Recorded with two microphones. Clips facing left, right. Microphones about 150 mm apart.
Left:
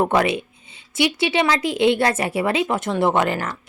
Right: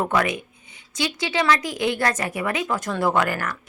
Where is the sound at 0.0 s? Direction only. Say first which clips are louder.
Left 4 dB; 25° left (ahead or behind).